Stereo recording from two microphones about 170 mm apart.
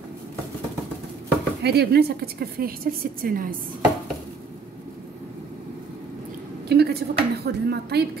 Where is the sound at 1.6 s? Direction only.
70° right (ahead or behind).